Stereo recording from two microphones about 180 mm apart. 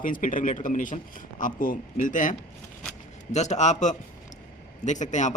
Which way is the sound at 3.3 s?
40° left (ahead or behind).